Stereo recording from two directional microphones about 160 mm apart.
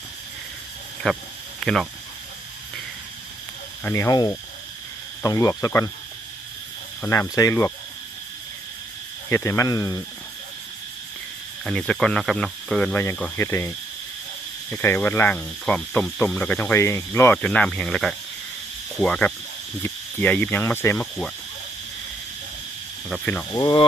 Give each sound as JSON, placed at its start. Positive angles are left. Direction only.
{"t": 1.0, "sound": "speech", "side_deg": 0}
{"t": 3.8, "sound": "speech", "side_deg": 20}
{"t": 7.0, "sound": "speech", "side_deg": 15}
{"t": 9.3, "sound": "speech", "side_deg": 15}
{"t": 11.6, "sound": "speech", "side_deg": 5}
{"t": 17.3, "sound": "speech", "side_deg": 5}
{"t": 23.0, "sound": "speech", "side_deg": 0}
{"t": 23.6, "sound": "speech", "side_deg": 25}